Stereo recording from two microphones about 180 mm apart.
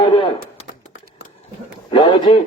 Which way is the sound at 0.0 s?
25° left (ahead or behind).